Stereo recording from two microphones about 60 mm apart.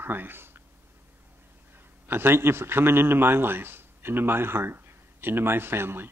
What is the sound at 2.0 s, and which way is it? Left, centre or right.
A man's voice, right.